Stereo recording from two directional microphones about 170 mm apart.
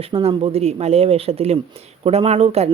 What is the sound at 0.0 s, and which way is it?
Speech, 35° right (ahead or behind).